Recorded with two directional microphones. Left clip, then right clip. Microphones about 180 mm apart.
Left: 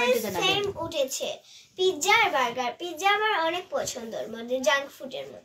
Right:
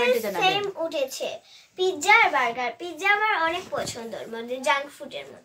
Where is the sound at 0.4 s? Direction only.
40° right (ahead or behind).